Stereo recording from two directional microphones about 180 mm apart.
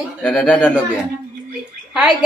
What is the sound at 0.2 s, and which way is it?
Speech, 5° left (ahead or behind).